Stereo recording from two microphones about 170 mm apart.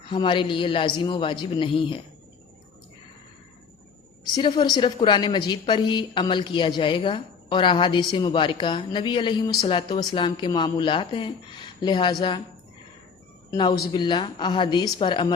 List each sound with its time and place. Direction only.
0.1 s a woman's voice: 30° left (ahead or behind)
4.3 s a woman's voice: 25° left (ahead or behind)
13.5 s a woman's voice: 25° left (ahead or behind)